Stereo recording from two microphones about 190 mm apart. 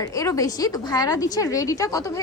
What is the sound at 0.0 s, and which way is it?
A woman's voice, 15° left (ahead or behind).